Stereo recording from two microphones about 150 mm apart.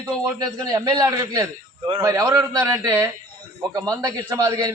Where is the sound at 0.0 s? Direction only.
25° right (ahead or behind).